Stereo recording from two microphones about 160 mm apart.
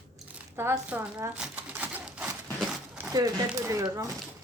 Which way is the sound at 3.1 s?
20° right (ahead or behind).